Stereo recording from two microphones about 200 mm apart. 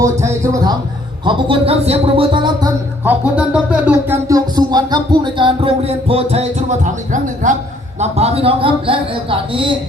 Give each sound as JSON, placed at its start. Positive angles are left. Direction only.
{"t": 0.0, "sound": "a man's voice", "side_deg": -15}
{"t": 3.0, "sound": "speech", "side_deg": -10}